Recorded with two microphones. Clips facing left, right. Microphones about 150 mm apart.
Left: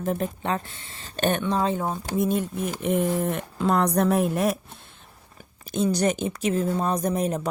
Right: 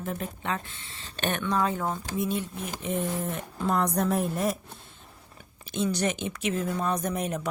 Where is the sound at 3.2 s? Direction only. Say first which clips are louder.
Left 5 dB; 75° left (ahead or behind).